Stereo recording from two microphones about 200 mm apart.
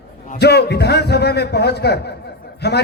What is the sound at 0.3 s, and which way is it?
A man's voice, 55° left (ahead or behind).